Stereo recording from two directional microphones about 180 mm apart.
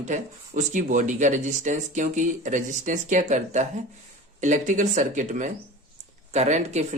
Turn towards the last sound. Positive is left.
turn(degrees=-40)  # may be behind; listen again after turning